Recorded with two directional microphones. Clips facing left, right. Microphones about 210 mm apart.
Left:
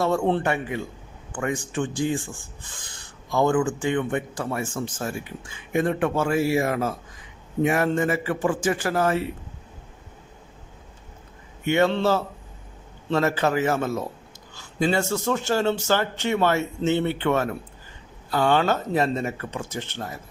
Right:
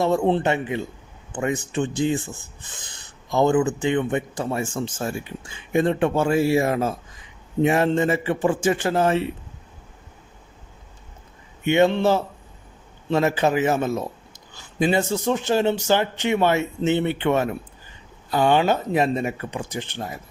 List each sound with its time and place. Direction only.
0.0 s speech: 20° right (ahead or behind)
11.6 s speech: 20° right (ahead or behind)